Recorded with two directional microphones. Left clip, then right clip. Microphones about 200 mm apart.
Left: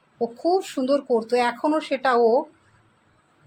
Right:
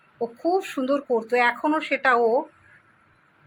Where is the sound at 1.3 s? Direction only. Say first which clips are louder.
Even; 15° left (ahead or behind).